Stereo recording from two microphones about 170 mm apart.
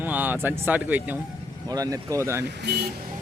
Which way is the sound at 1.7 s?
20° right (ahead or behind).